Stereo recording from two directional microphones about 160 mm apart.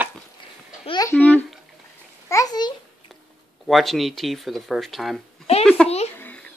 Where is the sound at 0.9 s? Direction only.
25° left (ahead or behind).